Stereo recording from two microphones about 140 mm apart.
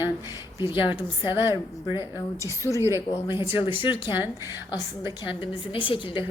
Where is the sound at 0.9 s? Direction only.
15° right (ahead or behind).